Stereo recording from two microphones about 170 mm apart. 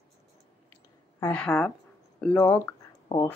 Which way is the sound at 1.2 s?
5° left (ahead or behind).